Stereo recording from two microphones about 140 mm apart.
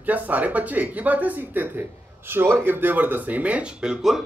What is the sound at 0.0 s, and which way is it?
Speech, 10° right (ahead or behind).